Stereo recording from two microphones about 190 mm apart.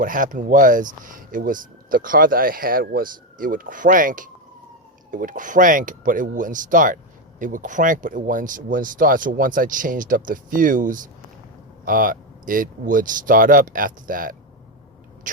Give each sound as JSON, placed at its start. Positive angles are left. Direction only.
{"t": 0.0, "sound": "speech", "side_deg": -45}